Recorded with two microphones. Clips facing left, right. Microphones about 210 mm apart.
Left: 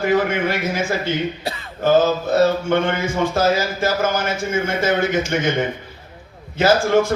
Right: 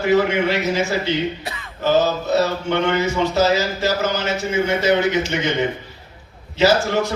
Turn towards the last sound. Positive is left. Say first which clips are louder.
# left 2 dB
turn(degrees=50)  # may be behind; listen again after turning